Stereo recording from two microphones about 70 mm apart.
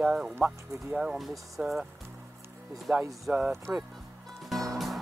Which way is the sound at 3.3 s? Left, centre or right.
Right.